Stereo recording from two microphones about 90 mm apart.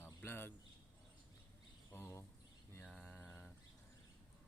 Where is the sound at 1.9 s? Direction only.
25° left (ahead or behind).